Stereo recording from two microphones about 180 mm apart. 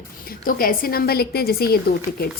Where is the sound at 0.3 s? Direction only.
55° left (ahead or behind).